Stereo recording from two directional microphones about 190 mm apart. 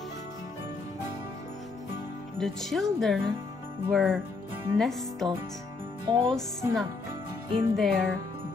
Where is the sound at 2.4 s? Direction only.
Centre (ahead or behind).